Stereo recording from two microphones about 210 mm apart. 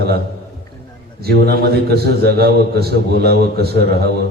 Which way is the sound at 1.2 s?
50° right (ahead or behind).